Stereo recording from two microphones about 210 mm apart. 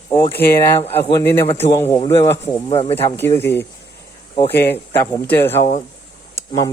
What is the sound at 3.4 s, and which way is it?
Speech, 10° left (ahead or behind).